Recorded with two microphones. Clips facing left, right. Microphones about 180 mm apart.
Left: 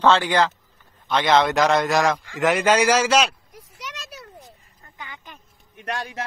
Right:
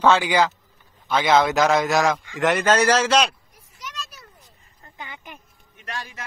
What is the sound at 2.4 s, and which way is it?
Speech, 10° left (ahead or behind).